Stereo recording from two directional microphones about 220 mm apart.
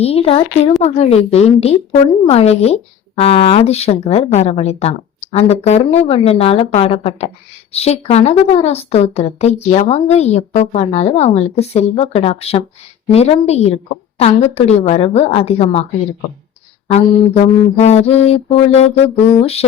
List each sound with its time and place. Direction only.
0.0 s a woman's voice: 25° left (ahead or behind)
16.9 s a woman's voice: 30° left (ahead or behind)